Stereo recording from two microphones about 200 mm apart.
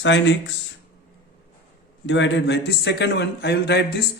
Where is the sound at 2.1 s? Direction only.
65° left (ahead or behind).